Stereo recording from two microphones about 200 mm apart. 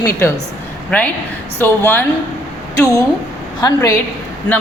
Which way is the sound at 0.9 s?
5° left (ahead or behind).